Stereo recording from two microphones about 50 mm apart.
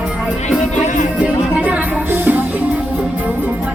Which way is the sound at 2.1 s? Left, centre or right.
Right.